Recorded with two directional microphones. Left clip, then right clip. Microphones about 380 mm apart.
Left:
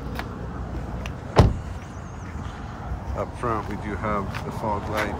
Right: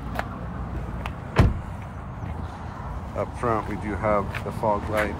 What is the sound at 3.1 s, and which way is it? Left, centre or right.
Speech, centre.